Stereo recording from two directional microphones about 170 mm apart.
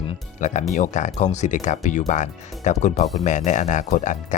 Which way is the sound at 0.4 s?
45° left (ahead or behind).